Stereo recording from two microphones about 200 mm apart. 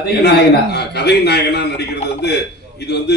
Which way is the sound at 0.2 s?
55° left (ahead or behind).